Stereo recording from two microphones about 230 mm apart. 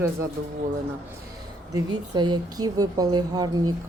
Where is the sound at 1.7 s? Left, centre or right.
Centre.